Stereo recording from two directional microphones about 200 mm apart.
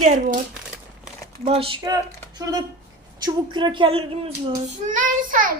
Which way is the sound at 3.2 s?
25° right (ahead or behind).